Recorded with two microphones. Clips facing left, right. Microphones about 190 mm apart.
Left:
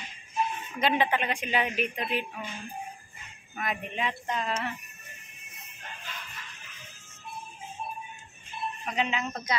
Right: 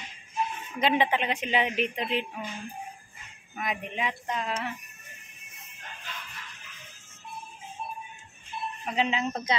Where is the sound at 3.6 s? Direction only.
15° right (ahead or behind).